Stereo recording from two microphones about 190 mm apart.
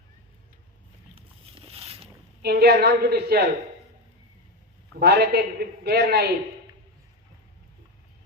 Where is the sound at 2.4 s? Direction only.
55° right (ahead or behind).